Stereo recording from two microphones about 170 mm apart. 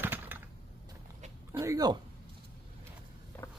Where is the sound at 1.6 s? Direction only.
20° right (ahead or behind).